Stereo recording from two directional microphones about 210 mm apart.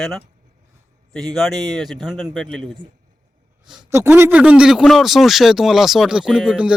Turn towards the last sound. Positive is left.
turn(degrees=-5)  # may be behind; listen again after turning